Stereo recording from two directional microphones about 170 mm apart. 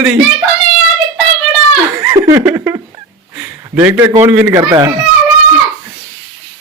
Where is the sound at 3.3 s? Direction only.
15° right (ahead or behind).